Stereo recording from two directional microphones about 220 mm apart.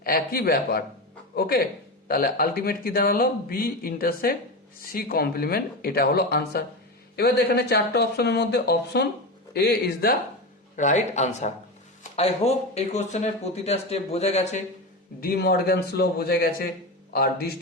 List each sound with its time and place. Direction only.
0.0 s speech: 45° left (ahead or behind)
10.8 s speech: 35° left (ahead or behind)
15.2 s speech: 45° left (ahead or behind)